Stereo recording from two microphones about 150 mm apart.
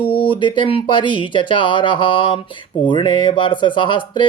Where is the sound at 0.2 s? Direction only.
35° left (ahead or behind).